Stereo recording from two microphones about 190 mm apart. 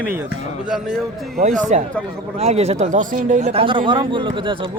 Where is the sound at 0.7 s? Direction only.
5° right (ahead or behind).